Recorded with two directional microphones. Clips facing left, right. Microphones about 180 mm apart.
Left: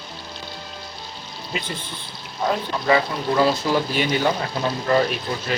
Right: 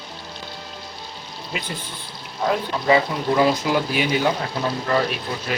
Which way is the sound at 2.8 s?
15° right (ahead or behind).